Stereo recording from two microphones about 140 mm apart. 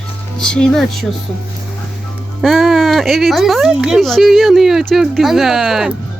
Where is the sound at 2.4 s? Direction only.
Centre (ahead or behind).